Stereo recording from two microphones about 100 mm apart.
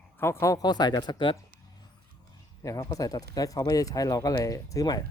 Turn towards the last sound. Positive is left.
turn(degrees=40)  # may be behind; listen again after turning